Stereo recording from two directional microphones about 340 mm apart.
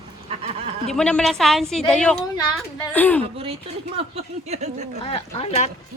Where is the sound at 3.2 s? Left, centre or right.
Centre.